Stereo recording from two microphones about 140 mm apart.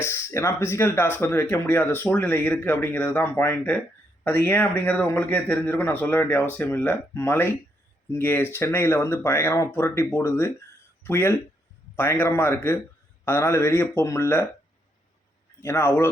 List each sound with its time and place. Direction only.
0.0 s speech: 20° left (ahead or behind)
15.6 s speech: 15° left (ahead or behind)